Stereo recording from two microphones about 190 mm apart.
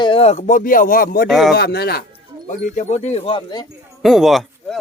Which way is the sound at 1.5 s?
55° left (ahead or behind).